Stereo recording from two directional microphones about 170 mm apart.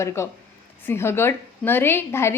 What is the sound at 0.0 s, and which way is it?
A woman's voice, 15° left (ahead or behind).